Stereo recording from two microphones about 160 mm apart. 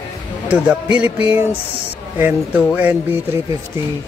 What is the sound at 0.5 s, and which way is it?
Speech, 10° right (ahead or behind).